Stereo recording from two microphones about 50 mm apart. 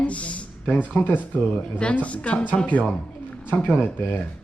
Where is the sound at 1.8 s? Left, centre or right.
Left.